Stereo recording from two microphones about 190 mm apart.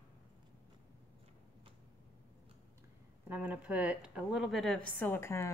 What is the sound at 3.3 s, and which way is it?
A woman's voice, 5° right (ahead or behind).